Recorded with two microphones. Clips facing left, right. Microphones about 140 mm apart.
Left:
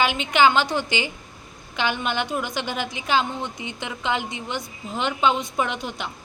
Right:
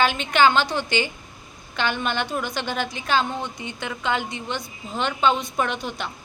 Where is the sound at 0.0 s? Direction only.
15° left (ahead or behind).